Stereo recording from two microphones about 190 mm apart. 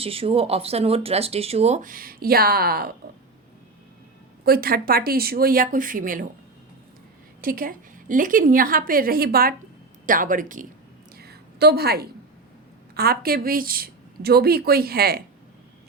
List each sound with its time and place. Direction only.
0.0 s speech: 30° right (ahead or behind); by 2.9 s 55° right (ahead or behind)
4.4 s a woman's voice: 50° right (ahead or behind)
7.4 s a woman's voice: 45° right (ahead or behind)
11.2 s a sound: 55° right (ahead or behind)
13.0 s a woman's voice: 50° right (ahead or behind)